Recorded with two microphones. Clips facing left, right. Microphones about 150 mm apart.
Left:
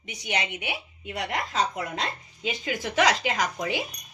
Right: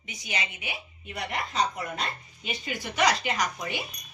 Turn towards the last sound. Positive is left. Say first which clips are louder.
# left 3 dB
turn(degrees=90)